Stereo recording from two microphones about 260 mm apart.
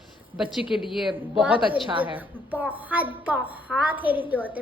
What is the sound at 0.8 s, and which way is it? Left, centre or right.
Speech, centre.